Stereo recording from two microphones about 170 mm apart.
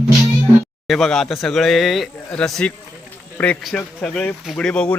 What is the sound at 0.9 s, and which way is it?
Speech, 5° left (ahead or behind).